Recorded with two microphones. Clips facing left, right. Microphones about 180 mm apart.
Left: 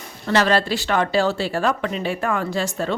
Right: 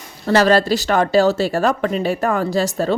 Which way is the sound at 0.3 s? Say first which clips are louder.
Right 5 dB; 40° right (ahead or behind).